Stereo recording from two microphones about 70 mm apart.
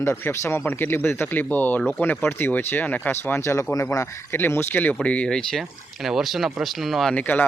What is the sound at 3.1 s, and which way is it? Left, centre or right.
Speech, left.